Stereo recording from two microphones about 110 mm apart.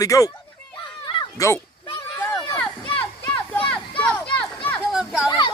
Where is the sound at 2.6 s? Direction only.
15° left (ahead or behind).